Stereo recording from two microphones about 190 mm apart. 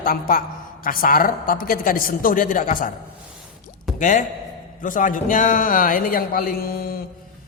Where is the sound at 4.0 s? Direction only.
45° left (ahead or behind).